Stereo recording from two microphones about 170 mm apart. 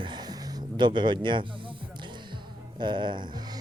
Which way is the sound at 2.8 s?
25° right (ahead or behind).